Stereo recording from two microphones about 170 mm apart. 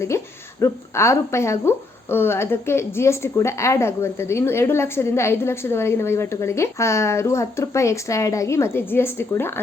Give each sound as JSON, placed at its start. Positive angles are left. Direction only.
{"t": 0.1, "sound": "speech", "side_deg": 15}